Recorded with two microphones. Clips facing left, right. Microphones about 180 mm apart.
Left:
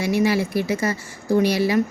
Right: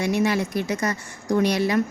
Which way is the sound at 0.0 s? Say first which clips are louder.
Left 2 dB; 5° left (ahead or behind).